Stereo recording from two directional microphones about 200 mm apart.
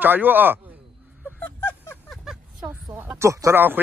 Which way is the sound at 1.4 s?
10° left (ahead or behind).